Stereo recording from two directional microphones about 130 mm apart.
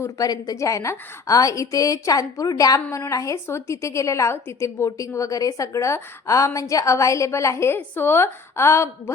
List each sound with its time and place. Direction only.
0.0 s a woman's voice: 30° left (ahead or behind)